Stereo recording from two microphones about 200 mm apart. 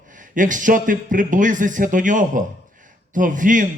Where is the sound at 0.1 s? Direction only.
40° right (ahead or behind).